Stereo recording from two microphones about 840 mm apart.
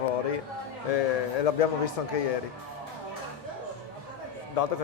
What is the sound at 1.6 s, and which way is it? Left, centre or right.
Speech, left.